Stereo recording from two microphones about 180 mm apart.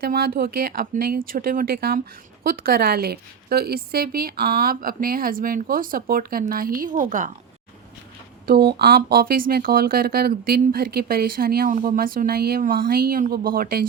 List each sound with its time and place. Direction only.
0.0 s a woman's voice: 55° right (ahead or behind)
8.4 s speech: 60° right (ahead or behind)